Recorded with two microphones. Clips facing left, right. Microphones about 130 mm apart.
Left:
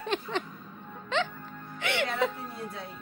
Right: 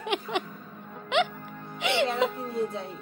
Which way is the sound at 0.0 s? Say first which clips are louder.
Right 2 dB; 15° right (ahead or behind).